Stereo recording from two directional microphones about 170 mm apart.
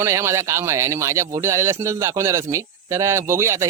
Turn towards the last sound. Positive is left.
turn(degrees=-15)  # may be behind; listen again after turning